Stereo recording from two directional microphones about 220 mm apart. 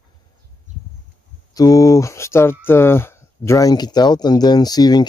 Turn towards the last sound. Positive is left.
turn(degrees=20)  # may be behind; listen again after turning